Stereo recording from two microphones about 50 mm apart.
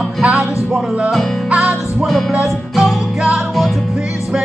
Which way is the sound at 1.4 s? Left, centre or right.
Centre.